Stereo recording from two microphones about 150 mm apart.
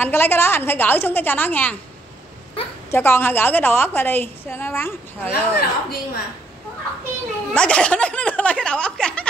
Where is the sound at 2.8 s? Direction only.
15° left (ahead or behind).